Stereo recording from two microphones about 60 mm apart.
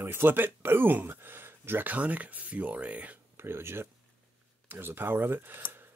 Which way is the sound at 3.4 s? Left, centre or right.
Right.